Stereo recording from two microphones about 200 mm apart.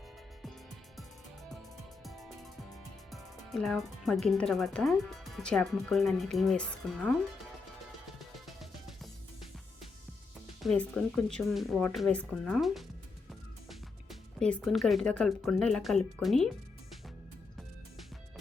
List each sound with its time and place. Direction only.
2.0 s music: centre (ahead or behind)
3.1 s speech: centre (ahead or behind)
8.4 s music: centre (ahead or behind)
10.6 s speech: 5° left (ahead or behind)